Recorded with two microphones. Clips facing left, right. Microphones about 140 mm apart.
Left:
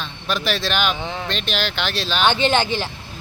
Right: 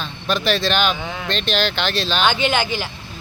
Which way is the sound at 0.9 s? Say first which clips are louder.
Left 1 dB; 25° left (ahead or behind).